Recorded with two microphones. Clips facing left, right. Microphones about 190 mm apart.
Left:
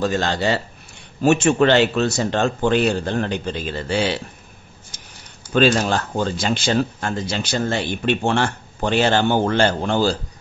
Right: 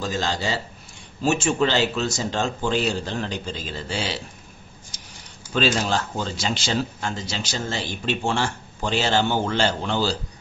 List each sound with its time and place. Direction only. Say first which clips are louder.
0.0 s speech: left 6 dB; 60° left (ahead or behind)
4.9 s a sound: left 1 dB; 55° left (ahead or behind)
5.5 s speech: left 5 dB; 55° left (ahead or behind)